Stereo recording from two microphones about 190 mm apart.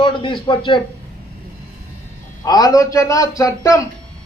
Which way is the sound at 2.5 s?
20° left (ahead or behind).